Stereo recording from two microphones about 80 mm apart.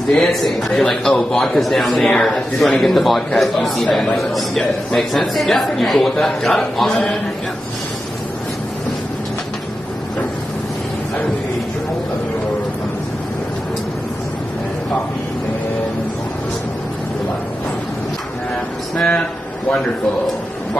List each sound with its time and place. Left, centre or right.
0.1 s a man's voice: centre
18.9 s speech: centre